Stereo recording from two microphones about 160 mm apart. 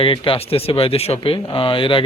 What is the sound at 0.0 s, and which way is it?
Speech, 35° left (ahead or behind).